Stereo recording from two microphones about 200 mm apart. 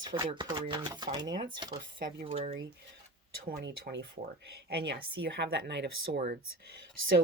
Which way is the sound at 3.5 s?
55° right (ahead or behind).